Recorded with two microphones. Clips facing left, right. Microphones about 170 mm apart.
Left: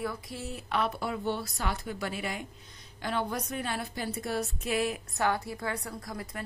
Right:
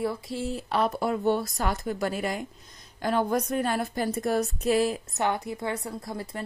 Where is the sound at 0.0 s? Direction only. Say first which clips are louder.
Right 6 dB; 25° right (ahead or behind).